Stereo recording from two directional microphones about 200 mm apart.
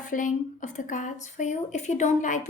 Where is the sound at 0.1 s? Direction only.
40° left (ahead or behind).